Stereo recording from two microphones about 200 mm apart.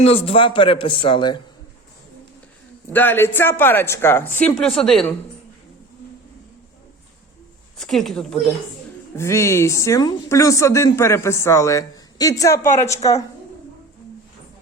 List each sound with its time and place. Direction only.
0.0 s speech: 30° left (ahead or behind)
2.9 s a woman's voice: 10° left (ahead or behind)
7.8 s speech: centre (ahead or behind)
9.1 s a woman's voice: 15° left (ahead or behind)